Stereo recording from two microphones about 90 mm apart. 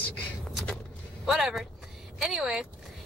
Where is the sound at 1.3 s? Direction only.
5° right (ahead or behind).